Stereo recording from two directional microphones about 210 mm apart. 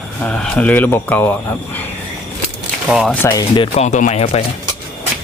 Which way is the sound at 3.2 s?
15° left (ahead or behind).